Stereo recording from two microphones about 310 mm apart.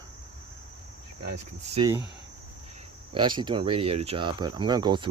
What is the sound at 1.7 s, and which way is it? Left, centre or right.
Speech, centre.